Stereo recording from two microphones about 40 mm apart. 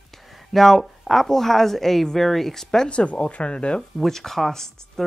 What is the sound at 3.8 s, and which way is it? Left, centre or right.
Speech, centre.